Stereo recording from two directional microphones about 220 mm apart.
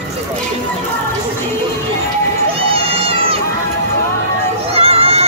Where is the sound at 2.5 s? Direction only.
25° right (ahead or behind).